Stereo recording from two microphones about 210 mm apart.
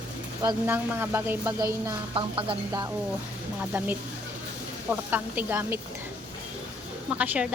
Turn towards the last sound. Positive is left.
turn(degrees=-5)  # may be behind; listen again after turning